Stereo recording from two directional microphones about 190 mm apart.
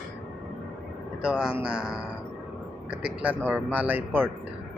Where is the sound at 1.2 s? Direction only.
5° right (ahead or behind).